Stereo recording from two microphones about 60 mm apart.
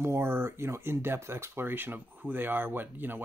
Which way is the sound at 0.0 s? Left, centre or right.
Right.